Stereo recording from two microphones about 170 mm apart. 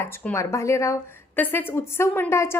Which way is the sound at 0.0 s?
10° left (ahead or behind).